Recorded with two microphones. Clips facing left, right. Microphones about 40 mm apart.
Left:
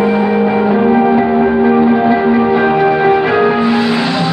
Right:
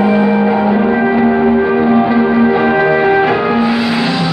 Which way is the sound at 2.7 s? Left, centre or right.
Centre.